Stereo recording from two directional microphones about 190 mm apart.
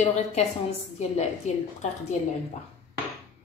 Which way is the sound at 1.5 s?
40° left (ahead or behind).